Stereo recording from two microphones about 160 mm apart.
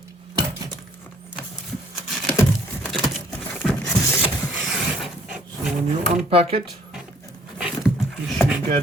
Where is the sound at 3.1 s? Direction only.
5° left (ahead or behind).